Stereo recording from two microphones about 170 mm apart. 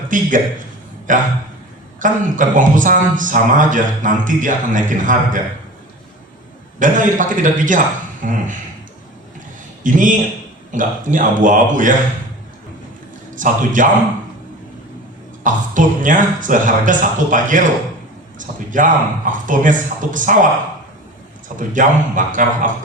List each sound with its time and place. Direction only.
0.1 s speech: 50° right (ahead or behind)
6.7 s speech: 50° right (ahead or behind)
9.8 s speech: 50° right (ahead or behind)
13.3 s speech: 50° right (ahead or behind)
15.4 s speech: 50° right (ahead or behind)
21.7 s speech: 50° right (ahead or behind)